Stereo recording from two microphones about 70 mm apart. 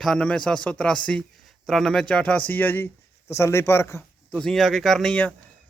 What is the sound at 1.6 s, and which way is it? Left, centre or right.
Speech, centre.